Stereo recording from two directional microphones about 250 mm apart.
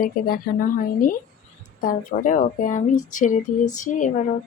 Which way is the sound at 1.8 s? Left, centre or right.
Left.